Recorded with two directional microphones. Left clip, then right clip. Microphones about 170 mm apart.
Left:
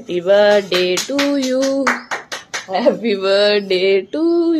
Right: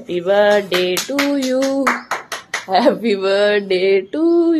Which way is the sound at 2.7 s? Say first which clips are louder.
Right 2 dB; 20° right (ahead or behind).